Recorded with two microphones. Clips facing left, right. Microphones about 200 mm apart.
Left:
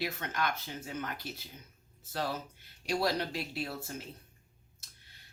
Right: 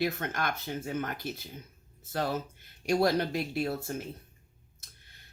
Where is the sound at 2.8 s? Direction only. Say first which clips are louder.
Right 6 dB; 50° right (ahead or behind).